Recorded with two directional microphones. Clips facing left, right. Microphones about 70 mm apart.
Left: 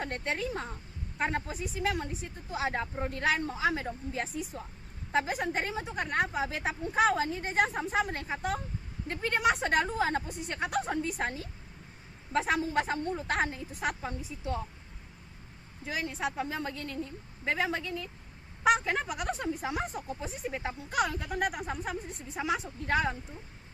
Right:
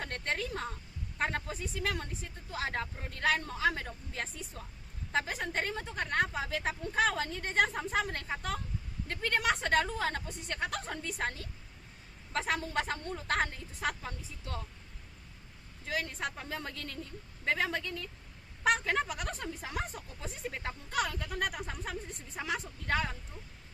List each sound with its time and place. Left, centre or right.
0.0 s a woman's voice: centre
15.9 s a woman's voice: centre